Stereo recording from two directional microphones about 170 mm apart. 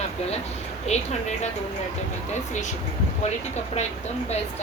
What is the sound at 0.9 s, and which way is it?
Speech, 40° left (ahead or behind).